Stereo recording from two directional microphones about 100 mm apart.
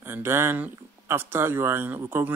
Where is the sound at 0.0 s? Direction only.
25° right (ahead or behind).